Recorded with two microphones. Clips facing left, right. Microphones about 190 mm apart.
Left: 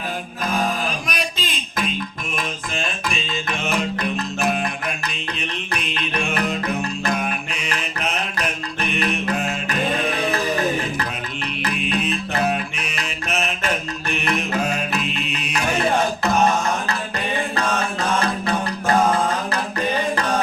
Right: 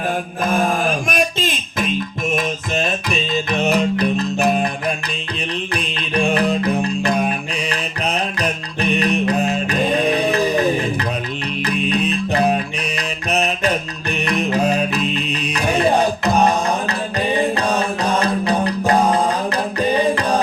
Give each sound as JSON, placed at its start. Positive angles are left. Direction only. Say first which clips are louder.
{"t": 0.4, "sound": "music", "louder": "right 5 dB", "side_deg": -50}
{"t": 11.6, "sound": "music", "louder": "right 4 dB", "side_deg": -35}
{"t": 20.1, "sound": "music", "louder": "right 3 dB", "side_deg": -35}